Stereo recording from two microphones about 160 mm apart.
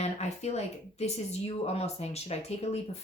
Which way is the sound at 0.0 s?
45° left (ahead or behind).